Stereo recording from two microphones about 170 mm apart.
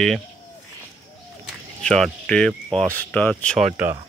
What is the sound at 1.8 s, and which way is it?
Speech, 5° left (ahead or behind).